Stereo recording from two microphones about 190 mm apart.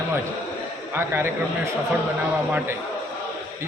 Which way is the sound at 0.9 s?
10° right (ahead or behind).